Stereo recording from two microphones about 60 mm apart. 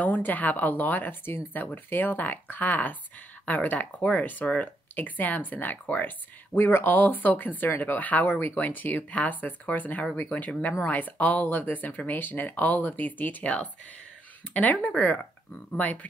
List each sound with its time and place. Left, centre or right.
0.0 s speech: left